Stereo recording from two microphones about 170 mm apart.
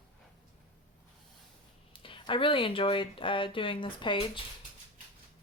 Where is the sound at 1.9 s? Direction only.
30° left (ahead or behind).